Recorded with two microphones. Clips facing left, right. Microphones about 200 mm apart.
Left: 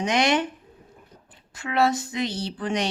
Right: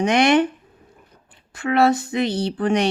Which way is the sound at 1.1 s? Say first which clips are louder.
Left 2 dB; 30° left (ahead or behind).